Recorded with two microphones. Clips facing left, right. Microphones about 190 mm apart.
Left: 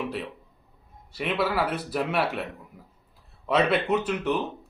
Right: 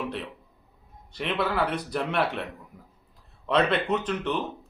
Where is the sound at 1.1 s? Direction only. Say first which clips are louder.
Left 1 dB; 5° left (ahead or behind).